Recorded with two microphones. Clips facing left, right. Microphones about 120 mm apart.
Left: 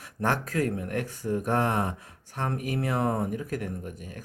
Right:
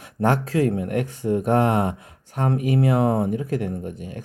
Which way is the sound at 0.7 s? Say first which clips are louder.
Right 7 dB; 20° right (ahead or behind).